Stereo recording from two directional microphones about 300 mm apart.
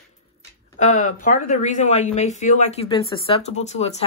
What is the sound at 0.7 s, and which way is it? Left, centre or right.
Speech, left.